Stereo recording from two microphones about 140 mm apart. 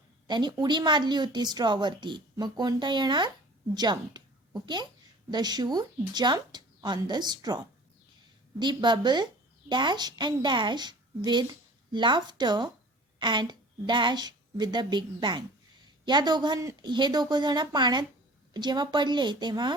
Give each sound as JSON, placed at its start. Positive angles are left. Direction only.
{"t": 0.3, "sound": "a woman's voice", "side_deg": -30}